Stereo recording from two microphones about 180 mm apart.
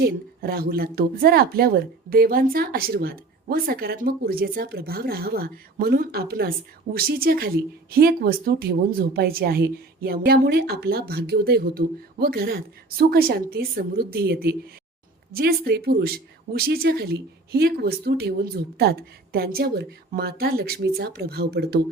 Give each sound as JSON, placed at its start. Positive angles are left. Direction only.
{"t": 0.0, "sound": "speech", "side_deg": -60}